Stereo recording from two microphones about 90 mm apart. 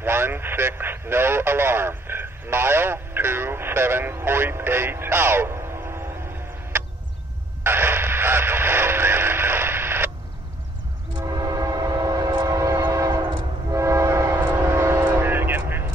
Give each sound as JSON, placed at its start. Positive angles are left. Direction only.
{"t": 0.0, "sound": "speech", "side_deg": -25}
{"t": 7.6, "sound": "radio", "side_deg": -25}
{"t": 11.2, "sound": "train", "side_deg": -45}
{"t": 15.1, "sound": "vehicle", "side_deg": -25}